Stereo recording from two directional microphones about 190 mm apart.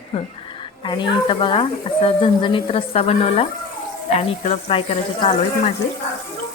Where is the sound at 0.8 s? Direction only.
25° left (ahead or behind).